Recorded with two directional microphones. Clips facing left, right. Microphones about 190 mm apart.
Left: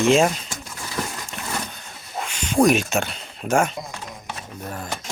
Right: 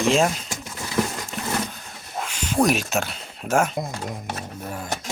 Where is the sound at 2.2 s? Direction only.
5° right (ahead or behind).